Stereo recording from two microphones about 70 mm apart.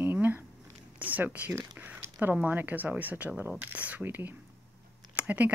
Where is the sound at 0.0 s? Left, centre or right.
Right.